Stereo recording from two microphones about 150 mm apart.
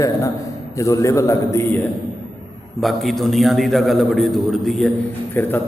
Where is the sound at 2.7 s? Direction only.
Centre (ahead or behind).